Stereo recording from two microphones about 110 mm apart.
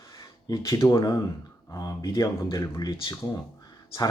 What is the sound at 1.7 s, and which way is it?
Speech, 35° left (ahead or behind).